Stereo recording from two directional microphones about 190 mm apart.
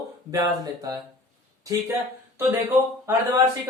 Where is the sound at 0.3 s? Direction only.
20° right (ahead or behind).